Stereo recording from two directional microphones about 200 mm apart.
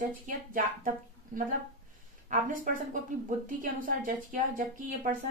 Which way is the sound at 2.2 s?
40° right (ahead or behind).